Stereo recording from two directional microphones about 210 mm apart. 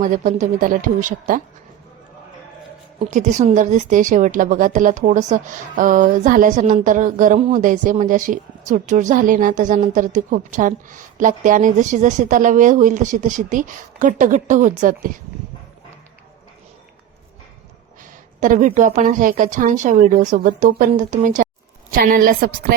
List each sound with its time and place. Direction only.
0.0 s a woman's voice: 40° right (ahead or behind)
3.1 s a woman's voice: 35° right (ahead or behind)
18.3 s a woman's voice: 35° right (ahead or behind)